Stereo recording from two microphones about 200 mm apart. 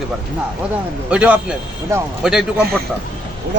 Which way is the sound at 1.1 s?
5° right (ahead or behind).